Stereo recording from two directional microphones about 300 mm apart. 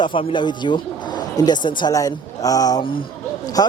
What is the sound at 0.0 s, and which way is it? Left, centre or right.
Speech, centre.